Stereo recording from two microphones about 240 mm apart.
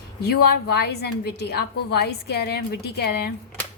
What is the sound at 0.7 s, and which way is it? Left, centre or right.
A woman's voice, left.